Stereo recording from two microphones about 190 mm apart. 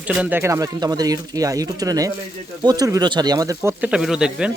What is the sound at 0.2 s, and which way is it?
Speech, 10° right (ahead or behind).